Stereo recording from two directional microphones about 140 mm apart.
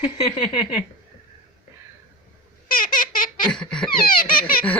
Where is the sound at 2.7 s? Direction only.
80° left.